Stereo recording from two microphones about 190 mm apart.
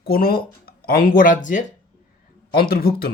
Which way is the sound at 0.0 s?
50° left (ahead or behind).